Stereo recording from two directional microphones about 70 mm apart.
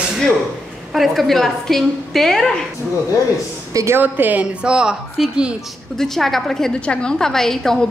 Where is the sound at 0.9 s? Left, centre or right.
Centre.